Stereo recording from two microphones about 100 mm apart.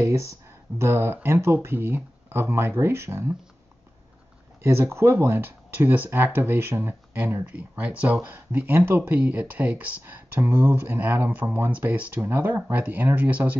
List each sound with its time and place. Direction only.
0.0 s speech: 30° right (ahead or behind)
4.6 s speech: 25° right (ahead or behind)